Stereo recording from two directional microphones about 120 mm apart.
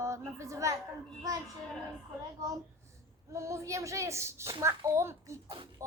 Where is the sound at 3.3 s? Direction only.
25° right (ahead or behind).